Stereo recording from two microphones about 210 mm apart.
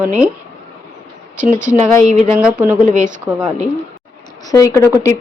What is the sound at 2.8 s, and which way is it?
Speech, 35° right (ahead or behind).